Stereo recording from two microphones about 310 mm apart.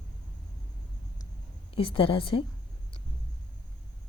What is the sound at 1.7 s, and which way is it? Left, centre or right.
Speech, centre.